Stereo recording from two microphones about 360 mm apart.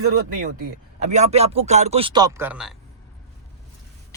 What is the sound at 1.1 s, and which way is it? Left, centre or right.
Speech, centre.